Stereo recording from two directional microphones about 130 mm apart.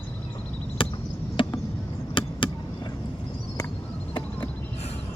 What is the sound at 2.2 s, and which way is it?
Vehicle, 40° left (ahead or behind).